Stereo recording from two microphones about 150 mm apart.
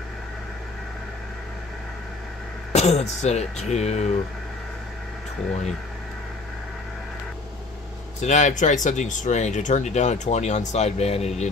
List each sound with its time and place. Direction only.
2.7 s speech: 45° left (ahead or behind)
8.2 s speech: 55° left (ahead or behind)